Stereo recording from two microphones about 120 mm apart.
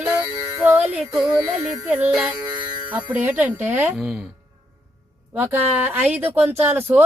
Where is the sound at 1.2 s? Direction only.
5° right (ahead or behind).